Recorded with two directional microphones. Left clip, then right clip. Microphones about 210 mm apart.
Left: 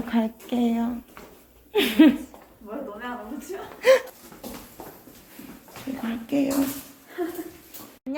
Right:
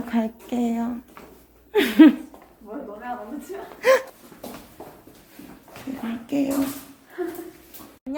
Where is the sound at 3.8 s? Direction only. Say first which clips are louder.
Even; 10° right (ahead or behind).